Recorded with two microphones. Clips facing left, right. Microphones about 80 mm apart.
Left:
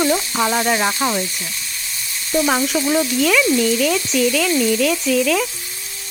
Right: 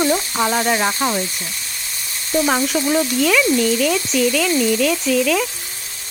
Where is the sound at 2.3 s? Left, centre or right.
Centre.